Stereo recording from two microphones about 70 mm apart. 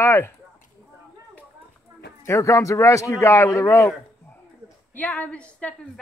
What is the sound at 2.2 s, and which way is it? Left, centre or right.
A man's voice, left.